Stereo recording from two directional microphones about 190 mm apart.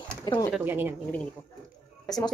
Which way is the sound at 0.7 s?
10° right (ahead or behind).